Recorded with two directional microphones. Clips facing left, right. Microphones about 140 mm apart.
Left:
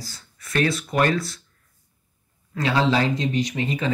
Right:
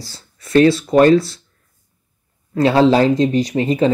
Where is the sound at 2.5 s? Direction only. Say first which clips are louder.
Right 9 dB; 35° right (ahead or behind).